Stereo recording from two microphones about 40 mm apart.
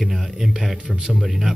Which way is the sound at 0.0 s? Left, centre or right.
Centre.